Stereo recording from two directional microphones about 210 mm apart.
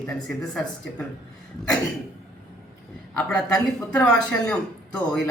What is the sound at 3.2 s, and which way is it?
A woman's voice, 5° left (ahead or behind).